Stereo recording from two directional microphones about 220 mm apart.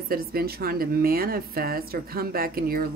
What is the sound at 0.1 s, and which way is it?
Speech, 45° right (ahead or behind).